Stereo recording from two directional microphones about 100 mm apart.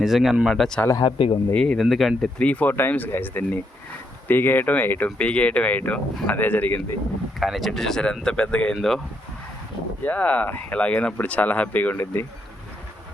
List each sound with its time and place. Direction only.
0.0 s speech: 5° right (ahead or behind)
1.0 s speech: 60° left (ahead or behind)
1.5 s speech: 10° left (ahead or behind)
2.4 s speech: 15° left (ahead or behind)
7.3 s speech: centre (ahead or behind)
10.0 s speech: 15° left (ahead or behind)